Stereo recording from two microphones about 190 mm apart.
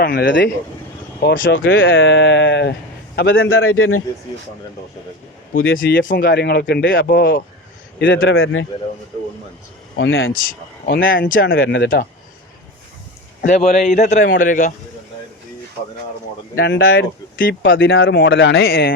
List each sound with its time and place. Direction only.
0.0 s a man's voice: 55° left (ahead or behind); by 4.0 s 90° left
5.6 s speech: 85° left
6.0 s speech: 50° left (ahead or behind); by 8.6 s 90° left
10.0 s a man's voice: 90° left
10.8 s speech: 50° left (ahead or behind)
11.6 s speech: 65° left (ahead or behind)
13.4 s a man's voice: 40° left (ahead or behind)
16.6 s speech: 65° left (ahead or behind)